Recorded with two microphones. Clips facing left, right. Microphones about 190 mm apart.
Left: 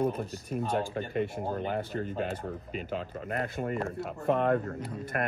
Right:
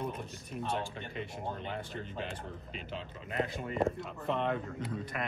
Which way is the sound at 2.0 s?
45° left (ahead or behind).